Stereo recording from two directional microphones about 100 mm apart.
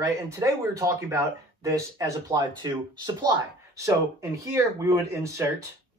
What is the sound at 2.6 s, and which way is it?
Speech, 45° right (ahead or behind).